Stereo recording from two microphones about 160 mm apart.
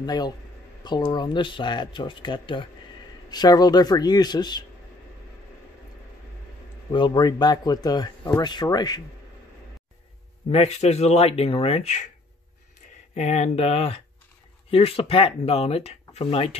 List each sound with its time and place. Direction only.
0.0 s speech: 25° left (ahead or behind)
6.9 s speech: 30° left (ahead or behind)
10.5 s speech: 40° left (ahead or behind)
13.1 s speech: 45° left (ahead or behind)